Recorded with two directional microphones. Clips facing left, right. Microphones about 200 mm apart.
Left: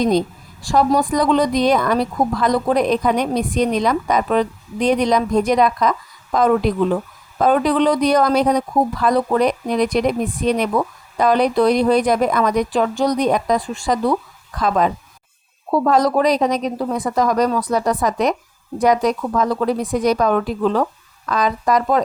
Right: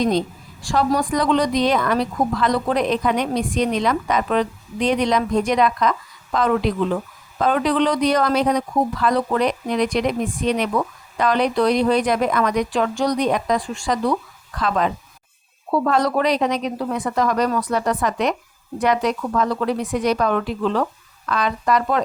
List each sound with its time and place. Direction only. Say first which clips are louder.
0.0 s a woman's voice: left 3 dB; 10° left (ahead or behind)
1.1 s a woman's voice: left 2 dB; 45° left (ahead or behind)
12.7 s speech: left 2 dB; 5° left (ahead or behind)
13.1 s a woman's voice: left 3 dB; 40° left (ahead or behind)
14.6 s a woman's voice: left 3 dB; 40° left (ahead or behind)